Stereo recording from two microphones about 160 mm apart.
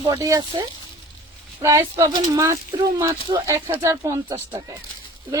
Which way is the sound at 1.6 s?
20° right (ahead or behind).